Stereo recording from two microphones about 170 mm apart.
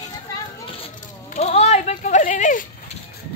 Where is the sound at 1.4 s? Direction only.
40° left (ahead or behind).